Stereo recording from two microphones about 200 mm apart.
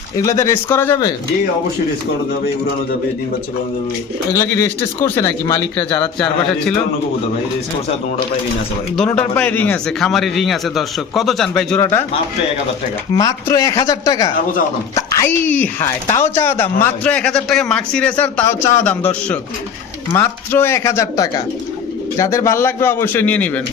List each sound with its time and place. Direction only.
0.2 s speech: 15° left (ahead or behind)
4.4 s speech: 15° left (ahead or behind)
9.0 s a man's voice: 5° left (ahead or behind)
13.1 s a man's voice: 15° left (ahead or behind)